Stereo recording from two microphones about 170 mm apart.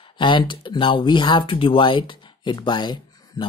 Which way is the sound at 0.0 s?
30° left (ahead or behind).